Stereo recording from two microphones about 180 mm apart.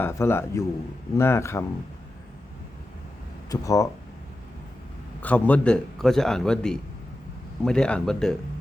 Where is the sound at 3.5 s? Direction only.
20° left (ahead or behind).